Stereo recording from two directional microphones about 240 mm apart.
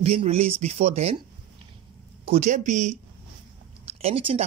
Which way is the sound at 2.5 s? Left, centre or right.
Right.